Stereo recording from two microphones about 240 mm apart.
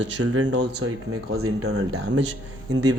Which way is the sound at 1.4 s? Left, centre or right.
Right.